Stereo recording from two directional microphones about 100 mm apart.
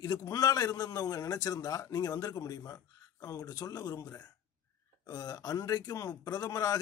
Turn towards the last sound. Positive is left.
turn(degrees=35)  # may be behind; listen again after turning